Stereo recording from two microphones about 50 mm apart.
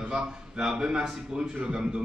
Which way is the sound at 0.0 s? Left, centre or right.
Centre.